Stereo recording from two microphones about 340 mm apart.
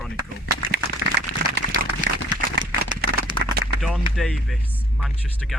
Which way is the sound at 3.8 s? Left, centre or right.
Centre.